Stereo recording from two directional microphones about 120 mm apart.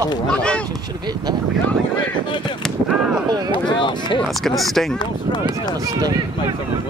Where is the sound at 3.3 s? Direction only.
35° right (ahead or behind).